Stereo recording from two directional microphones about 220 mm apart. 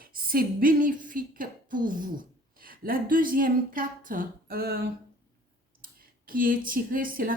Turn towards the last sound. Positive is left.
turn(degrees=-40)  # may be behind; listen again after turning